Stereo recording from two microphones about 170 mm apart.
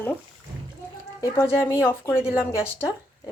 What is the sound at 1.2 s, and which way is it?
Speech, 15° left (ahead or behind).